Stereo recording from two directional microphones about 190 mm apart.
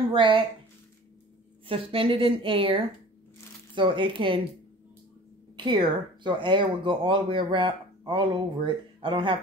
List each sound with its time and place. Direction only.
0.1 s speech: 25° right (ahead or behind)
1.7 s speech: 30° right (ahead or behind)
5.6 s speech: 25° right (ahead or behind)